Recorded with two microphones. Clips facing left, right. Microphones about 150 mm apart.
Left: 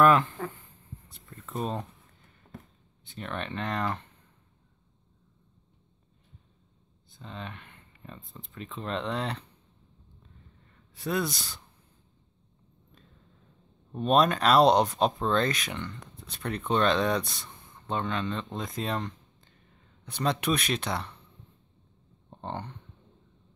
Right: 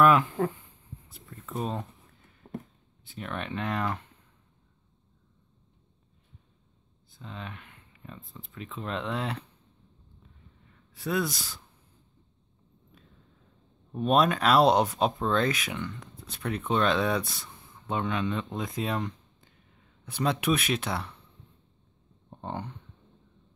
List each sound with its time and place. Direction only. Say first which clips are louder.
0.0 s speech: even; 10° right (ahead or behind)
1.0 s a sound: right 2 dB; 5° right (ahead or behind)
2.4 s a sound: right 8 dB; 30° right (ahead or behind)
3.0 s speech: even; 5° right (ahead or behind)
7.1 s speech: even; 5° right (ahead or behind)
11.0 s speech: right 1 dB; centre (ahead or behind)
13.9 s speech: even; 5° right (ahead or behind)
22.3 s speech: right 1 dB; 10° right (ahead or behind)